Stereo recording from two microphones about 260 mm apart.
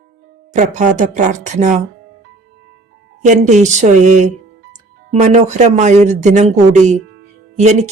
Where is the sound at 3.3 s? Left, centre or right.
Right.